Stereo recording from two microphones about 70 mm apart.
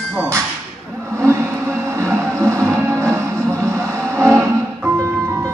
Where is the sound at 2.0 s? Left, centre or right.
Right.